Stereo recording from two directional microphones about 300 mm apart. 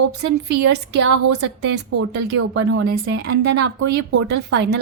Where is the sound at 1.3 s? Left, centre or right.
Right.